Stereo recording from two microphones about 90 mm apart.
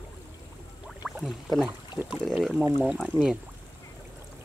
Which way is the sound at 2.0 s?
5° left (ahead or behind).